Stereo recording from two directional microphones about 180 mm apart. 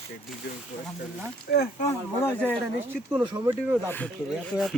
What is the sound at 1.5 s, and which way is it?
Speech, 60° left (ahead or behind).